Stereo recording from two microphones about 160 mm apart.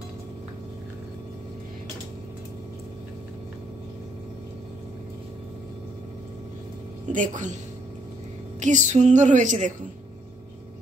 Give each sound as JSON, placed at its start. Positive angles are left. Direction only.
{"t": 7.1, "sound": "a woman's voice", "side_deg": -50}
{"t": 8.5, "sound": "a woman's voice", "side_deg": -50}